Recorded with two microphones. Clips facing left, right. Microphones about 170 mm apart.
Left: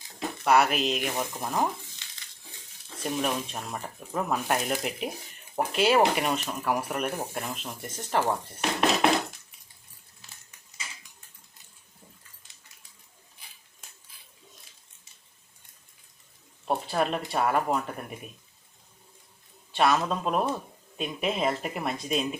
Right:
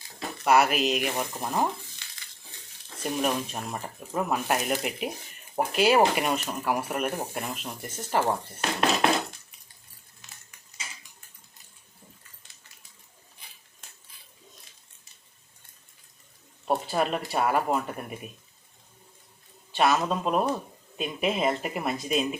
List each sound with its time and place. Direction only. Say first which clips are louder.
0.4 s speech: right 1 dB; centre (ahead or behind)
2.0 s a sound: right 1 dB; 20° left (ahead or behind)
3.0 s speech: right 2 dB; 5° right (ahead or behind)
10.2 s a sound: right 1 dB; 30° left (ahead or behind)
16.6 s speech: right 1 dB; centre (ahead or behind)
19.7 s speech: even; centre (ahead or behind)